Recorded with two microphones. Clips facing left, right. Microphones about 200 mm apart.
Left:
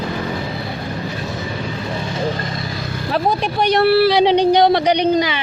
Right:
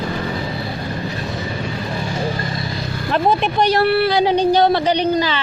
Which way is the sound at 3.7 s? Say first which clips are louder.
Left 5 dB; 20° left (ahead or behind).